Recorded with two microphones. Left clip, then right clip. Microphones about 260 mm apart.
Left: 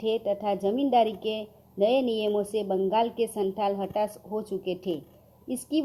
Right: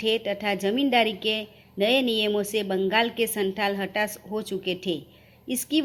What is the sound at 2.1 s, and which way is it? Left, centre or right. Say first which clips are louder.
A woman's voice: right 2 dB; right.